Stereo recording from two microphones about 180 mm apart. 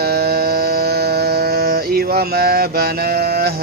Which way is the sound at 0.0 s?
60° right (ahead or behind).